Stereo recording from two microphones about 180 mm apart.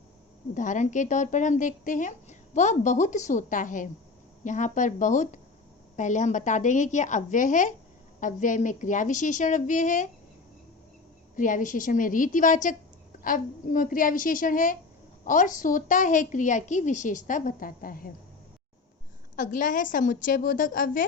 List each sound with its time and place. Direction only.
0.5 s a woman's voice: 45° left (ahead or behind)
11.3 s a woman's voice: 45° left (ahead or behind)
19.4 s a woman's voice: 50° left (ahead or behind)